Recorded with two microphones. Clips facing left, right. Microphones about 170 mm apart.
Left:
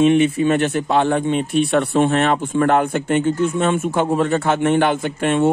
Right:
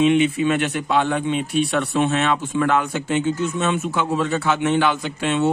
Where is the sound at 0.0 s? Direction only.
45° left (ahead or behind).